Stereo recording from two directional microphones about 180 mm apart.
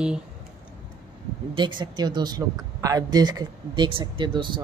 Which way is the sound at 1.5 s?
25° right (ahead or behind).